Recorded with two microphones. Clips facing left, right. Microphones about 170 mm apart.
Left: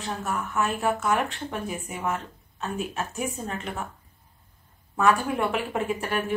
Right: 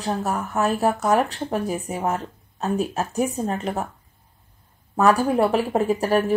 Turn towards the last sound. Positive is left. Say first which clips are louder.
# right 7 dB
turn(degrees=-35)  # may be behind; listen again after turning